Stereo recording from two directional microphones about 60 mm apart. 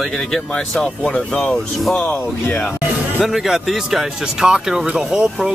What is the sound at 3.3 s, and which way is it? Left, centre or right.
Speech, centre.